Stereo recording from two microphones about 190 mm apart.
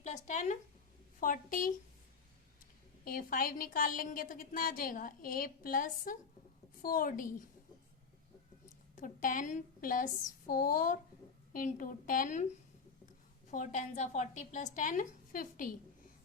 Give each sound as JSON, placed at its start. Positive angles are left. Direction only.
{"t": 0.0, "sound": "a woman's voice", "side_deg": 40}
{"t": 3.0, "sound": "a woman's voice", "side_deg": 50}
{"t": 9.0, "sound": "a woman's voice", "side_deg": 45}
{"t": 13.5, "sound": "a woman's voice", "side_deg": 40}